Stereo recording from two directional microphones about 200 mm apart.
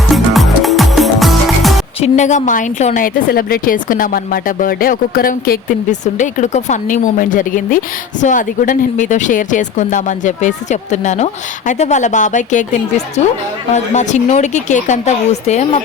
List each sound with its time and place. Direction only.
0.1 s music: centre (ahead or behind)
2.0 s speech: 35° left (ahead or behind)